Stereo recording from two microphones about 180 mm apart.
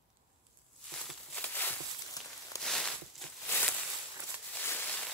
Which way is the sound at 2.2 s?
20° left (ahead or behind).